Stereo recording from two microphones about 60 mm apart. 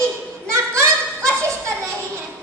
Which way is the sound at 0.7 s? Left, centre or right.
Right.